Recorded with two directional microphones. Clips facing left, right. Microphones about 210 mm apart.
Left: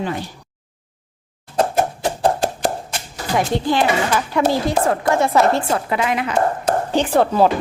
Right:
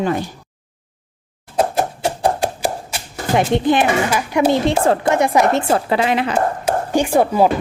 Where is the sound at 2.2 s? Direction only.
10° right (ahead or behind).